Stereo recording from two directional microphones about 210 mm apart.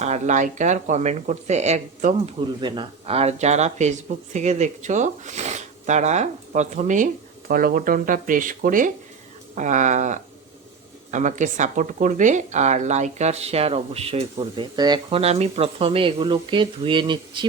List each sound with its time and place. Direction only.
0.0 s speech: 35° right (ahead or behind)
2.6 s speech: 20° right (ahead or behind)